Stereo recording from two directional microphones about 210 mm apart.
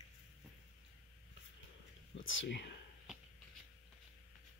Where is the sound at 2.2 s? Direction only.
60° left (ahead or behind).